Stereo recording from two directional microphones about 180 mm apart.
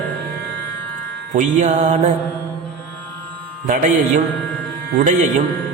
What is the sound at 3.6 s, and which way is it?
Speech, 45° right (ahead or behind).